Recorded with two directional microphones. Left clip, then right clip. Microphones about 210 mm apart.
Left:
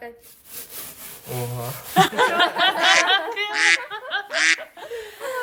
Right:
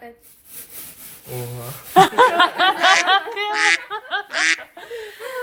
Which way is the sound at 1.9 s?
Centre (ahead or behind).